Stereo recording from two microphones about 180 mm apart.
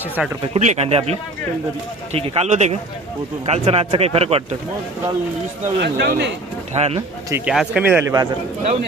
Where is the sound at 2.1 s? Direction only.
35° right (ahead or behind).